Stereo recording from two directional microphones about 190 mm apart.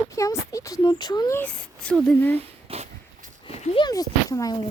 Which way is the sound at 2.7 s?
30° right (ahead or behind).